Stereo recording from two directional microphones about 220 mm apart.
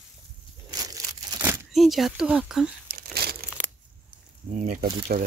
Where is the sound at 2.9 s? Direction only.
45° right (ahead or behind).